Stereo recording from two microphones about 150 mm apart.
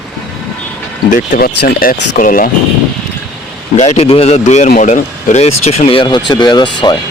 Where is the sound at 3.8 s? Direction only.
45° left (ahead or behind); by 6.9 s 30° left (ahead or behind).